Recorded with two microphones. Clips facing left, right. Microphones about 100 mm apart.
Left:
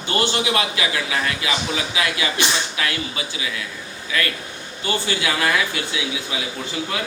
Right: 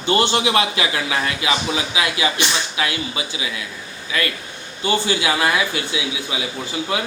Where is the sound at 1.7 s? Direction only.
15° right (ahead or behind).